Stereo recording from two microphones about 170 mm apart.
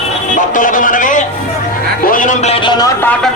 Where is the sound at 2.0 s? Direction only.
55° left (ahead or behind); by 2.9 s 25° left (ahead or behind).